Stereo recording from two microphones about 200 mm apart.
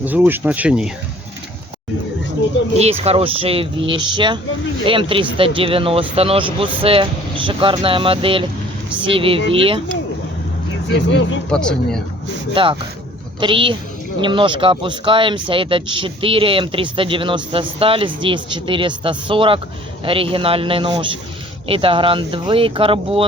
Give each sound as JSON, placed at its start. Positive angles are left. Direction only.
{"t": 0.0, "sound": "speech", "side_deg": -10}
{"t": 3.0, "sound": "speech", "side_deg": -30}
{"t": 10.8, "sound": "speech", "side_deg": 65}
{"t": 11.4, "sound": "speech", "side_deg": 5}
{"t": 12.6, "sound": "speech", "side_deg": -25}